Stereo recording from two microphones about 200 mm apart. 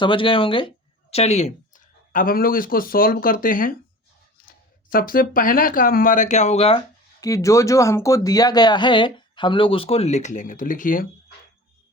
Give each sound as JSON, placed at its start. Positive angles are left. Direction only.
{"t": 0.0, "sound": "speech", "side_deg": 25}
{"t": 7.2, "sound": "speech", "side_deg": 15}